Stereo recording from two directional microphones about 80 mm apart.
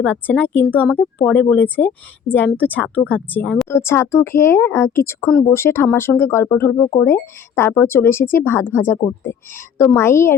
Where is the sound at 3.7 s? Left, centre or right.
Left.